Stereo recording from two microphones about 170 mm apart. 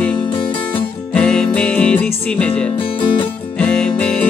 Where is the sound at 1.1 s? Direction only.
5° left (ahead or behind).